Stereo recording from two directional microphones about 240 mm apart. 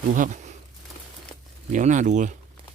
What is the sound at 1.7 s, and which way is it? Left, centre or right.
Speech, right.